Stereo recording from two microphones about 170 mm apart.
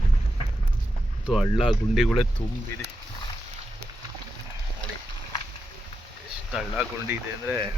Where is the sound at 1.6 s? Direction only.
5° right (ahead or behind).